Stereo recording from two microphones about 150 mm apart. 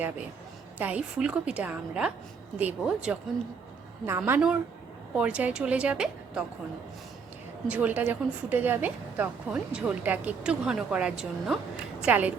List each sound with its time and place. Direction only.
0.8 s a woman's voice: 10° right (ahead or behind)
7.7 s a woman's voice: 10° right (ahead or behind)